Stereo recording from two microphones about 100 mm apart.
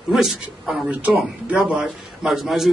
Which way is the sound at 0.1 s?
5° right (ahead or behind).